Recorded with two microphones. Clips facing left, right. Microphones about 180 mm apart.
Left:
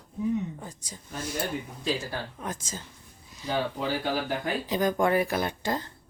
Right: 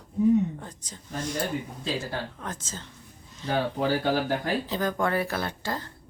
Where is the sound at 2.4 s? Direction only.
10° left (ahead or behind).